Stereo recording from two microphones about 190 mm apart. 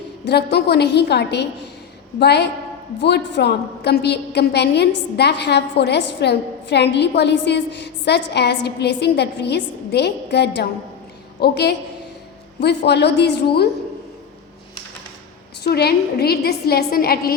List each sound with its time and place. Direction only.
0.3 s a woman's voice: 60° left (ahead or behind)
15.6 s a woman's voice: 55° left (ahead or behind)